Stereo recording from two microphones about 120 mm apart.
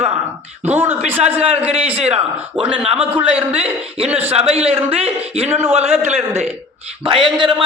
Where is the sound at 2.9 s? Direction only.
15° right (ahead or behind).